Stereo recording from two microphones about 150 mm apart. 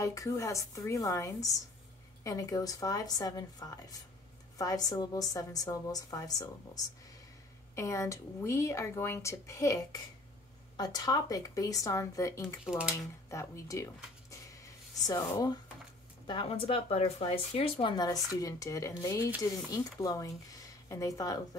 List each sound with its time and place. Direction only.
0.0 s speech: 20° left (ahead or behind)
12.6 s speech: 5° right (ahead or behind)
13.3 s speech: 20° left (ahead or behind)
15.0 s speech: 25° left (ahead or behind)
16.3 s speech: 35° left (ahead or behind)